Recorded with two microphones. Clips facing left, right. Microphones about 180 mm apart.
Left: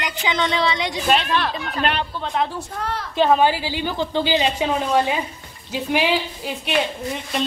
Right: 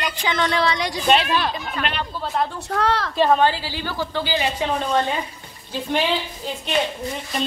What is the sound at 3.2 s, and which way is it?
Speech, 5° left (ahead or behind).